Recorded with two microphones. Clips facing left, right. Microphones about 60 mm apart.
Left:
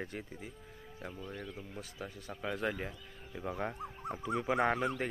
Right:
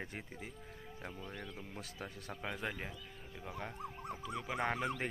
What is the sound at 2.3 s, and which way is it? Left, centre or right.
Speech, centre.